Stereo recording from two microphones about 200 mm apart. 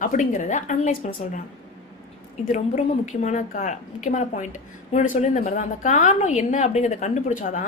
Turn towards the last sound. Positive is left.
turn(degrees=35)  # may be behind; listen again after turning